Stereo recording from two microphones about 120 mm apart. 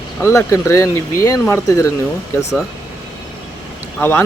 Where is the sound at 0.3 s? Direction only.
25° left (ahead or behind).